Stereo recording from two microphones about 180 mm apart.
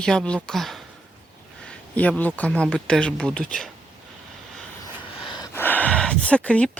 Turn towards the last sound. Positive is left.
turn(degrees=5)  # may be behind; listen again after turning